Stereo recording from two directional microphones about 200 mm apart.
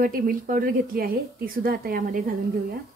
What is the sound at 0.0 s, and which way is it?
A woman's voice, 45° right (ahead or behind).